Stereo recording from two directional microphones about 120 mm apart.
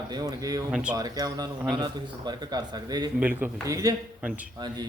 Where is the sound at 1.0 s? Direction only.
30° right (ahead or behind).